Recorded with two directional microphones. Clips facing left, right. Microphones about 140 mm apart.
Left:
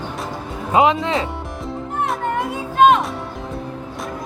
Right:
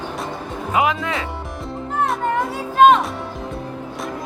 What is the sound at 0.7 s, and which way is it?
Speech, 25° left (ahead or behind).